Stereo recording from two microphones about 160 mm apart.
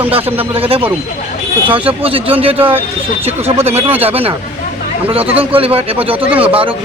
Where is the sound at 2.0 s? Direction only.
35° right (ahead or behind).